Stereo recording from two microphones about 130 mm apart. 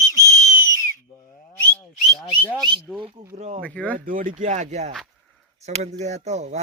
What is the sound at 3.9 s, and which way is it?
Speech, 90° right.